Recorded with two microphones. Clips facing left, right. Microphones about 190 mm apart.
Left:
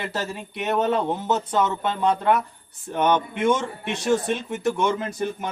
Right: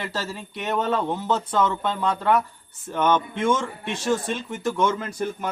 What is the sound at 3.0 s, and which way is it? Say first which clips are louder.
A man's voice: left 1 dB; 15° left (ahead or behind).